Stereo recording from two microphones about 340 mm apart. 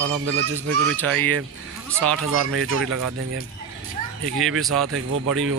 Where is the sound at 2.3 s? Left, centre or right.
Right.